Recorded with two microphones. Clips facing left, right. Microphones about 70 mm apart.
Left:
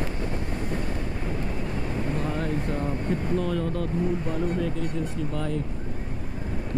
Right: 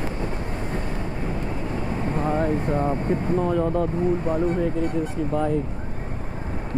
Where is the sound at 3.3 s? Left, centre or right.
Right.